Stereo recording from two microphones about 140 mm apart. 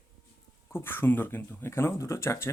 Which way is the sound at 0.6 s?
15° left (ahead or behind).